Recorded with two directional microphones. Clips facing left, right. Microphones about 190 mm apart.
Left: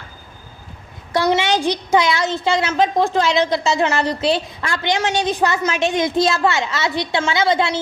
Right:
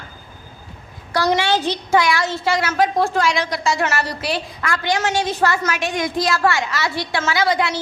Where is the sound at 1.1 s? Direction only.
25° left (ahead or behind).